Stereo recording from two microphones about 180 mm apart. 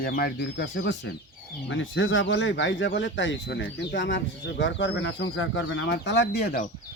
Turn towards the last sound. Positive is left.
turn(degrees=60)  # may be behind; listen again after turning